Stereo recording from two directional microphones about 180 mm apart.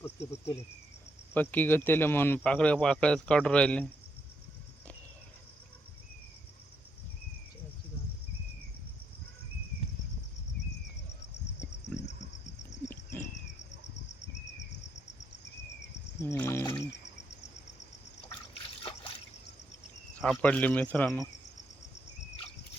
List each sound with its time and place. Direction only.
0.0 s cricket: 15° left (ahead or behind)
1.3 s speech: 10° left (ahead or behind)
16.2 s a sound: 15° left (ahead or behind)
20.2 s speech: 5° left (ahead or behind)